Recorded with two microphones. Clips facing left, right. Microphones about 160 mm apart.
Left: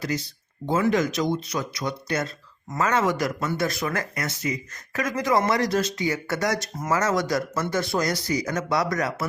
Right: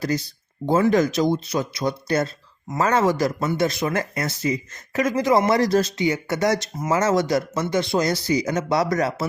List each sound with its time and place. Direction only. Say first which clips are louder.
0.6 s speech: right 4 dB; 35° right (ahead or behind)
6.1 s speech: right 4 dB; 20° right (ahead or behind)